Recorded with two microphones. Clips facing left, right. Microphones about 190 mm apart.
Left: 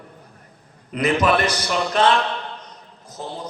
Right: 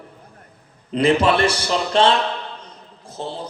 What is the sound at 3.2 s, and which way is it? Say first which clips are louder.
Speech: right 3 dB; 30° right (ahead or behind).